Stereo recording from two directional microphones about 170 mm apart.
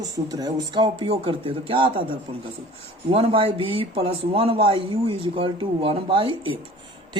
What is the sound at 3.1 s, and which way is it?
A man's voice, 30° right (ahead or behind).